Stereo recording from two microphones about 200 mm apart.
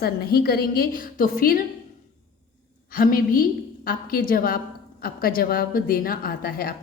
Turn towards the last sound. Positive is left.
turn(degrees=45)  # may be behind; listen again after turning